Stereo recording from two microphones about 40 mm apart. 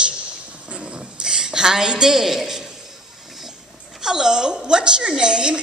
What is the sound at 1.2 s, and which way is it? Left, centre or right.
A woman's voice, centre.